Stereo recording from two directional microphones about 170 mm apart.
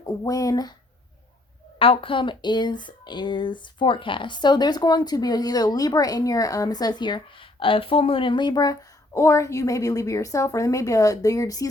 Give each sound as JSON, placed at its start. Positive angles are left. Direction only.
{"t": 0.0, "sound": "speech", "side_deg": 20}
{"t": 1.8, "sound": "speech", "side_deg": 30}